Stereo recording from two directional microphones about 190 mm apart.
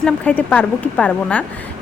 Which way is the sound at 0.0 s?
5° left (ahead or behind).